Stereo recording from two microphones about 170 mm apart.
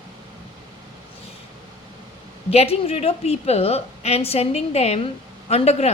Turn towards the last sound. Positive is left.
turn(degrees=40)  # may be behind; listen again after turning